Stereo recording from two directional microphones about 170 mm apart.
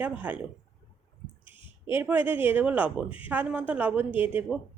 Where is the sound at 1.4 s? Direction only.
30° left (ahead or behind).